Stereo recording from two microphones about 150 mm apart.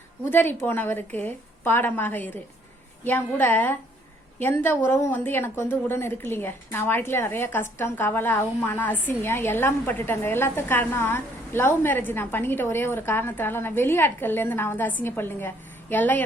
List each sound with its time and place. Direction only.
0.3 s speech: 15° left (ahead or behind)